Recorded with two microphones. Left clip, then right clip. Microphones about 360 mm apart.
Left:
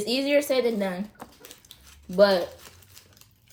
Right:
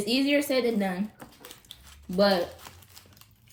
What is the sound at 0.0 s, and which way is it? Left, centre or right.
A woman's voice, centre.